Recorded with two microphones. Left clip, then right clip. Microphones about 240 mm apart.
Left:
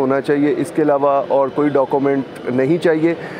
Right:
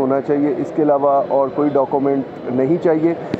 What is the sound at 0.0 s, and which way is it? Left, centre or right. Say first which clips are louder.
Speech: left 1 dB; left.